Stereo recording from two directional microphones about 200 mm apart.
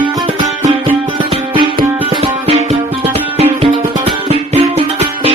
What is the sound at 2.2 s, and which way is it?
Music, 30° right (ahead or behind).